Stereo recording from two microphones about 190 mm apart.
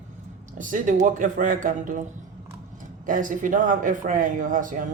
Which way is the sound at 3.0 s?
45° right (ahead or behind).